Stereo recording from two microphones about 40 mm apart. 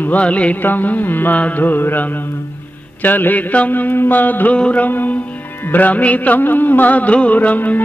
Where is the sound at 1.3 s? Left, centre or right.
Left.